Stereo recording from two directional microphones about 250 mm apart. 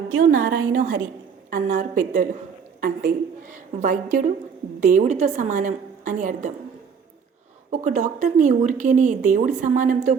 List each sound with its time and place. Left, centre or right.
0.2 s a woman's voice: right
7.9 s a woman's voice: right